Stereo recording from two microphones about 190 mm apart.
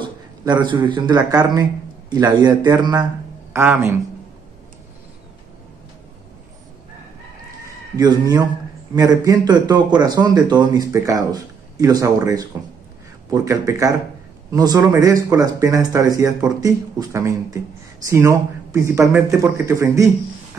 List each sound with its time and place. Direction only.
0.0 s a man's voice: 25° right (ahead or behind)
8.0 s a man's voice: 20° right (ahead or behind)